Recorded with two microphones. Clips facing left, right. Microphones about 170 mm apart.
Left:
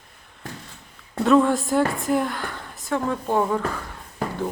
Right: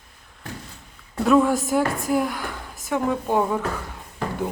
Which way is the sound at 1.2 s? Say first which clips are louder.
Even; 5° right (ahead or behind).